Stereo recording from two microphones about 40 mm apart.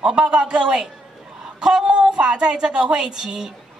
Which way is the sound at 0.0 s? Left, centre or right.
Right.